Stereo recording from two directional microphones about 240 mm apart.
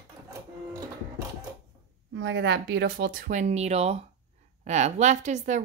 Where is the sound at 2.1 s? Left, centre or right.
Right.